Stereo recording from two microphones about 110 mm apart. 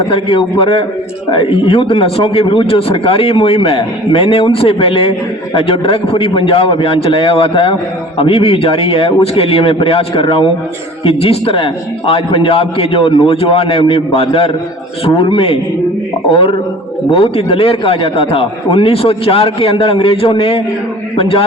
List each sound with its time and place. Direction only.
0.1 s a man's voice: 50° left (ahead or behind)
17.1 s a man's voice: 60° left (ahead or behind)